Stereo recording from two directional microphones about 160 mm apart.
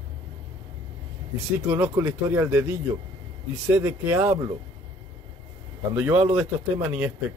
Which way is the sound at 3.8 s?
15° right (ahead or behind).